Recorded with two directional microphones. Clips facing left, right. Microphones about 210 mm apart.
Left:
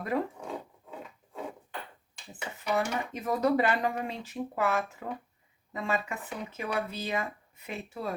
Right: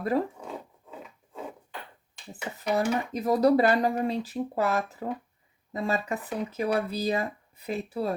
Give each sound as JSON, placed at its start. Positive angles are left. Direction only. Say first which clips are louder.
{"t": 0.3, "sound": "rub", "louder": "even", "side_deg": 0}
{"t": 2.3, "sound": "speech", "louder": "right 3 dB", "side_deg": -35}